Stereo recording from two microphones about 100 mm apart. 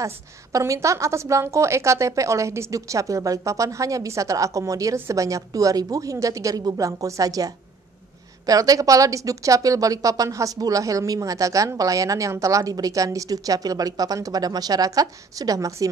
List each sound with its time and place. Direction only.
0.0 s speech: 35° right (ahead or behind)